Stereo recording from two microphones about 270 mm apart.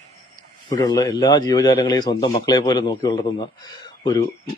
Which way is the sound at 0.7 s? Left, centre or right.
Centre.